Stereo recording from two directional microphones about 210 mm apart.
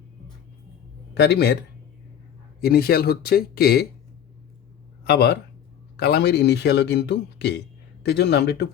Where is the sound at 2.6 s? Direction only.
45° left (ahead or behind).